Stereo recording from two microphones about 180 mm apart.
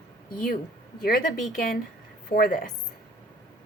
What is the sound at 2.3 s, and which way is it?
Speech, 55° left (ahead or behind).